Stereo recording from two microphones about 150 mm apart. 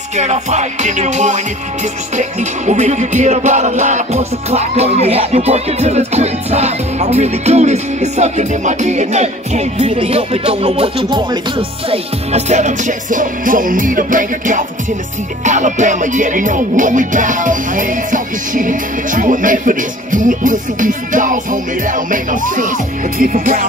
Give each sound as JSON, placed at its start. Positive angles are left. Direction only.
{"t": 0.1, "sound": "music", "side_deg": -50}